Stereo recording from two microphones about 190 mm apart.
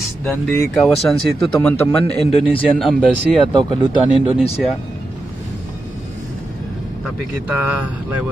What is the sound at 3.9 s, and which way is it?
Speech, 25° left (ahead or behind).